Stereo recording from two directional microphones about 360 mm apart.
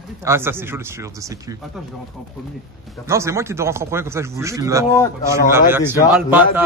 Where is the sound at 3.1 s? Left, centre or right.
Centre.